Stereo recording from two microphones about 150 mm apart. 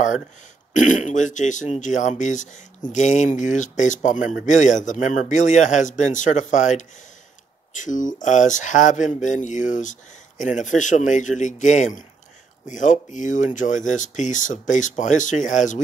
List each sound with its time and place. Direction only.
0.7 s speech: 55° left (ahead or behind)